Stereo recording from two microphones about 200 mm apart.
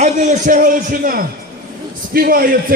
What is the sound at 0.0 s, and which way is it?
A man's voice, 35° right (ahead or behind).